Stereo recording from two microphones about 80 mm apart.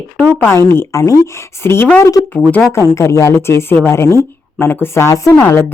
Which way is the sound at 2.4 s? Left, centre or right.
Centre.